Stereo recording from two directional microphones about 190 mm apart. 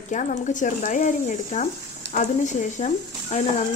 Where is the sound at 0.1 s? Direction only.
40° left (ahead or behind).